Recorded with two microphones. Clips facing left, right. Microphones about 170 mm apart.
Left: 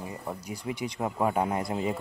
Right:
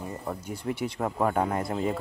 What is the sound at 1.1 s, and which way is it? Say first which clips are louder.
Speech: even; 10° left (ahead or behind).